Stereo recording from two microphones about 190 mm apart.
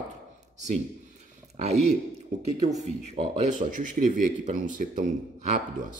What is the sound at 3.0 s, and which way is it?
Speech, 35° right (ahead or behind).